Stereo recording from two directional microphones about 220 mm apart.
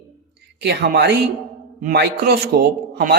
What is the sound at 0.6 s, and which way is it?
Speech, 50° right (ahead or behind).